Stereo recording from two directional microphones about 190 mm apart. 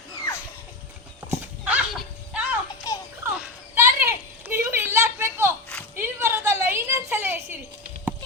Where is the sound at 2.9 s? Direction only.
20° left (ahead or behind).